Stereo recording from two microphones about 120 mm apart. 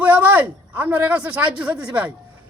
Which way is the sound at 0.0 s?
15° right (ahead or behind).